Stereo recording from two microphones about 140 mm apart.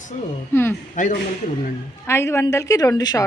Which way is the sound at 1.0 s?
70° left (ahead or behind).